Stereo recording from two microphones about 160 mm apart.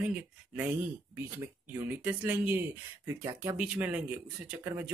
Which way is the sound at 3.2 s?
25° right (ahead or behind).